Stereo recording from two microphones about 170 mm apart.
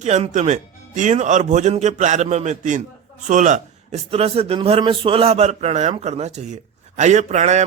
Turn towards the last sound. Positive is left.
turn(degrees=-45)  # may be behind; listen again after turning